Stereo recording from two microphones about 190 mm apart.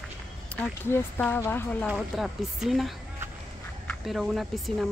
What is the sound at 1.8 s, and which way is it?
A woman's voice, 5° right (ahead or behind).